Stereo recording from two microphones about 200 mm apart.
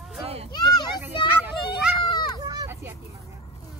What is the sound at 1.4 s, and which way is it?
Children playing, 5° right (ahead or behind).